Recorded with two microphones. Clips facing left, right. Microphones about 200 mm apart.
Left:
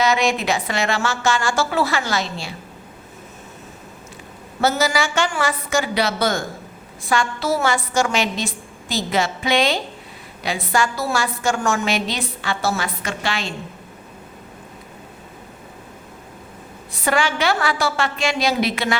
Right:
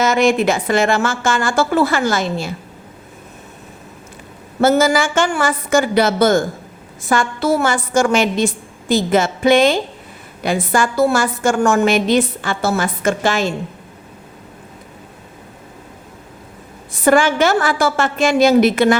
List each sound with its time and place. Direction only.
0.0 s a woman's voice: 50° right (ahead or behind)
4.6 s a woman's voice: 50° right (ahead or behind)
17.0 s a woman's voice: 50° right (ahead or behind)